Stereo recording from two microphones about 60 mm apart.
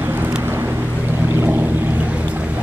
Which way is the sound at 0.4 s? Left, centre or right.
Right.